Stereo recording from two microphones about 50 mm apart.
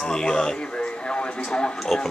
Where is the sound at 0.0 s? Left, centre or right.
Centre.